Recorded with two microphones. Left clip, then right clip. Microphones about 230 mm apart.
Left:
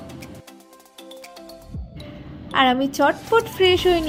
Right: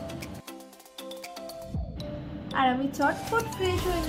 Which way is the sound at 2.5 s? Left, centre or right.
Left.